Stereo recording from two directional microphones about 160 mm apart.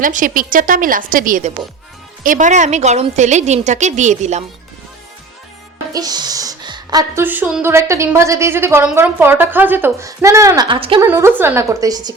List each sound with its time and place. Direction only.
0.0 s a woman's voice: 55° right (ahead or behind)
5.9 s a sound: 25° right (ahead or behind)
7.2 s a woman's voice: 10° right (ahead or behind); by 11.0 s 35° right (ahead or behind)
11.0 s a woman's voice: 15° right (ahead or behind)